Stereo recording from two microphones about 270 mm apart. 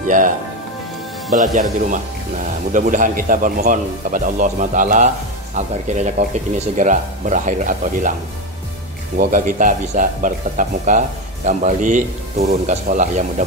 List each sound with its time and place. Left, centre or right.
0.0 s speech: right
1.3 s speech: right
9.2 s speech: right